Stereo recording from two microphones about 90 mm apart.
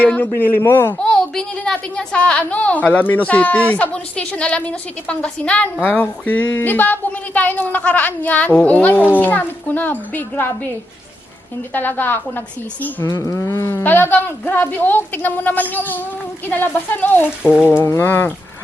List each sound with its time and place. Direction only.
0.0 s speech: 20° left (ahead or behind)
0.9 s a woman's voice: 10° left (ahead or behind)
11.7 s speech: 20° left (ahead or behind)
13.1 s speech: 40° left (ahead or behind); by 17.2 s 20° left (ahead or behind)
17.4 s speech: 10° right (ahead or behind)
17.7 s speech: 30° left (ahead or behind)